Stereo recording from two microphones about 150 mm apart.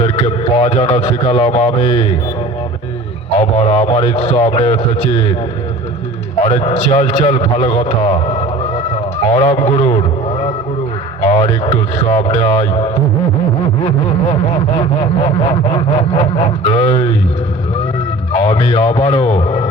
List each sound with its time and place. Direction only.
0.5 s a man's voice: 40° left (ahead or behind)
3.3 s a man's voice: 40° left (ahead or behind)
6.4 s a man's voice: 40° left (ahead or behind)
9.3 s a man's voice: 45° left (ahead or behind)
11.2 s a man's voice: 40° left (ahead or behind)
15.2 s a man's voice: 40° left (ahead or behind)
18.3 s a man's voice: 40° left (ahead or behind)